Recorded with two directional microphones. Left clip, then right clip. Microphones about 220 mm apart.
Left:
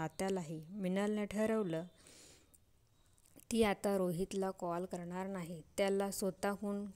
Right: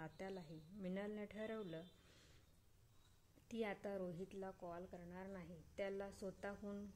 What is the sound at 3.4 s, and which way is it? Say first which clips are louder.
A woman's voice: left 13 dB; 40° left (ahead or behind).